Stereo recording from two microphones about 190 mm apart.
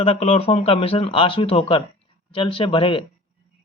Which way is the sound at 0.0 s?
30° left (ahead or behind).